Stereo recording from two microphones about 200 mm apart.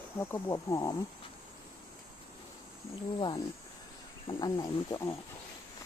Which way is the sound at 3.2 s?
20° left (ahead or behind).